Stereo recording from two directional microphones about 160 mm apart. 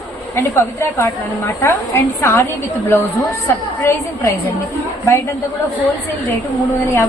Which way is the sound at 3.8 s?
20° left (ahead or behind).